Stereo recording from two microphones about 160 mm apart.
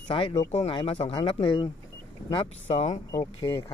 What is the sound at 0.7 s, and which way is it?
Speech, 35° left (ahead or behind).